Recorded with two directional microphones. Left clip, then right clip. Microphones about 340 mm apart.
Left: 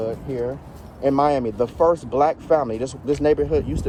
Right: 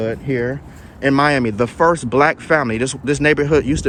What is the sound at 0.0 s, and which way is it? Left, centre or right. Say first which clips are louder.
Speech: right 5 dB; right.